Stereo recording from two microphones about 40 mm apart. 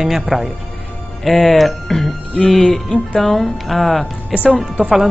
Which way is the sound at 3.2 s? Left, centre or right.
Centre.